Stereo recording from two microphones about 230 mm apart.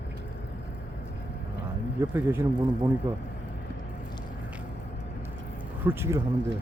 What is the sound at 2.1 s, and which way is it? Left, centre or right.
Speech, centre.